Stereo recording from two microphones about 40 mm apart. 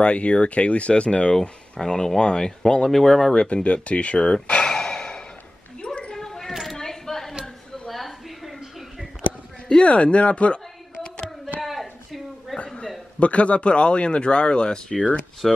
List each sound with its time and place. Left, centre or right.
0.0 s speech: left
1.4 s speech: centre
3.3 s speech: left
6.1 s a sound: centre
9.8 s speech: left
11.6 s a sound: centre
12.6 s a sound: centre
13.2 s speech: left
15.4 s speech: centre